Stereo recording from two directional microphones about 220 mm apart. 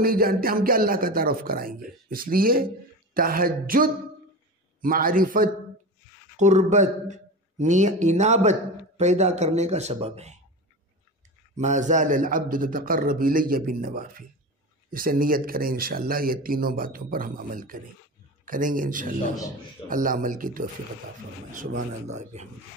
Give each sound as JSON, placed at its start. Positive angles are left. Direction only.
{"t": 0.0, "sound": "a man's voice", "side_deg": -40}
{"t": 11.5, "sound": "speech", "side_deg": -35}
{"t": 22.0, "sound": "speech", "side_deg": -30}